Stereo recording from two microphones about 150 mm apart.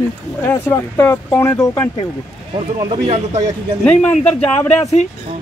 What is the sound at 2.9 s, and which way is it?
Speech, 45° right (ahead or behind).